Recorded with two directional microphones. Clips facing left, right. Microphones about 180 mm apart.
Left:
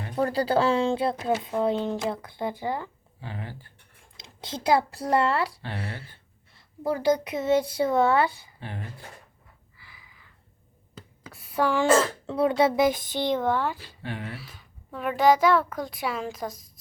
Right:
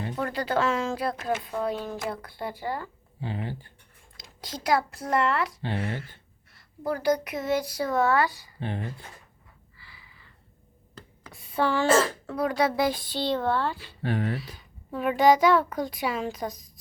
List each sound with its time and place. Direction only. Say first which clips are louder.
0.2 s speech: left 5 dB; 35° left (ahead or behind)
3.2 s speech: right 5 dB; 20° right (ahead or behind)
4.2 s speech: left 3 dB; 25° left (ahead or behind)
9.7 s a sound: even; 15° left (ahead or behind)
10.9 s throat clearing: left 2 dB; 5° left (ahead or behind)
12.3 s speech: left 5 dB; 25° left (ahead or behind)
14.0 s speech: right 8 dB; 40° right (ahead or behind)
14.3 s a child's voice: right 6 dB; centre (ahead or behind)